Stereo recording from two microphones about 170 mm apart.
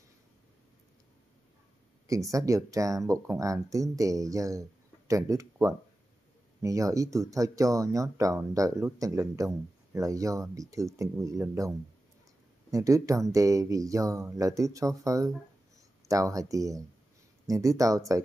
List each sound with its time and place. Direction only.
2.0 s speech: 20° right (ahead or behind)
12.7 s speech: 20° right (ahead or behind)